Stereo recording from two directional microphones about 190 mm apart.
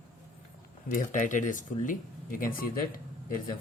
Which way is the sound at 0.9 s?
40° left (ahead or behind).